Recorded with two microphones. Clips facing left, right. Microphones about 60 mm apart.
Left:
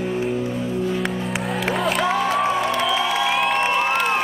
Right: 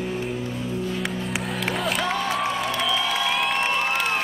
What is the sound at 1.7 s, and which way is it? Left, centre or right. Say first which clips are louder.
Music: left 5 dB; centre.